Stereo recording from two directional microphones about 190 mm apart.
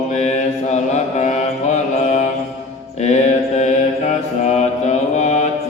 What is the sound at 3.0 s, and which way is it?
Mantra, 35° left (ahead or behind).